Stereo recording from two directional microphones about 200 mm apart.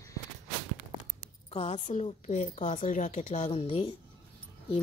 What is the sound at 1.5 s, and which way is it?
A woman's voice, 30° left (ahead or behind).